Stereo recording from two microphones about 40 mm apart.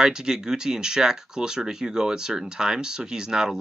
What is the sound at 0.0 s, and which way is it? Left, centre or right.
Speech, centre.